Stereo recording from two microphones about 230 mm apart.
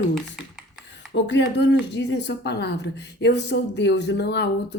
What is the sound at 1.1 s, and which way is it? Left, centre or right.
A woman's voice, left.